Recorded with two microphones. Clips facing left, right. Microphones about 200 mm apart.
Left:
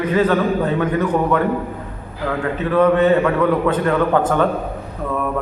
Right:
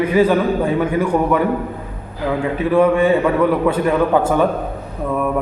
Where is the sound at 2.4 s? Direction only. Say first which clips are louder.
Right 1 dB; 10° right (ahead or behind).